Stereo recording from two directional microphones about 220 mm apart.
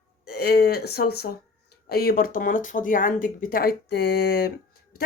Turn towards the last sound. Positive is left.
turn(degrees=45)  # may be behind; listen again after turning